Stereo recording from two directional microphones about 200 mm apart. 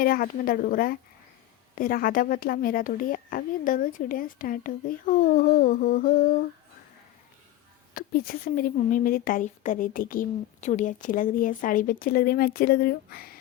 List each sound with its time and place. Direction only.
0.0 s speech: 45° left (ahead or behind)
7.9 s speech: 50° left (ahead or behind)